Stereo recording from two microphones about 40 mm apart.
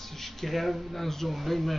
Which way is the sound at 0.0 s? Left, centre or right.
Centre.